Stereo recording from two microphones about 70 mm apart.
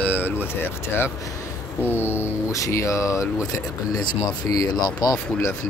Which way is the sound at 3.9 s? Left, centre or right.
Left.